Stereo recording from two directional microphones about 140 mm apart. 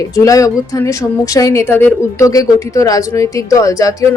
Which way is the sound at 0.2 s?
25° left (ahead or behind).